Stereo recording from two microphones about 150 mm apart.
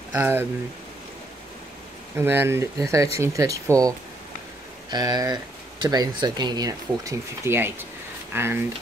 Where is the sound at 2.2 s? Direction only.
15° right (ahead or behind).